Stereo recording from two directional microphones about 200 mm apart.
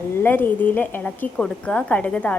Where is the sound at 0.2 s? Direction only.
10° left (ahead or behind).